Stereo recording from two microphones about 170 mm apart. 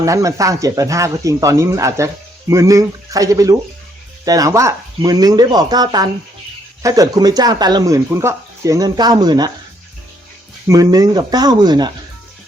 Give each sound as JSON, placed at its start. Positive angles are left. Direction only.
{"t": 0.0, "sound": "speech", "side_deg": -20}
{"t": 10.7, "sound": "speech", "side_deg": -20}